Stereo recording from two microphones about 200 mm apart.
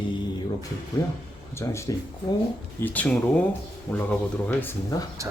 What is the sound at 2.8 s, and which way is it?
Speech, 5° left (ahead or behind).